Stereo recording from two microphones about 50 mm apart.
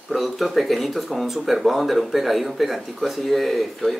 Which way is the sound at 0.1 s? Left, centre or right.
Centre.